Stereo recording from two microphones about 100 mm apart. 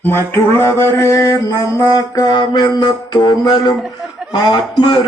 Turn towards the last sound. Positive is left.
turn(degrees=50)  # may be behind; listen again after turning